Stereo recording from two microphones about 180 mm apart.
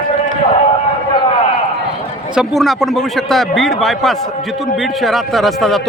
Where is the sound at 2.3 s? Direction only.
Centre (ahead or behind).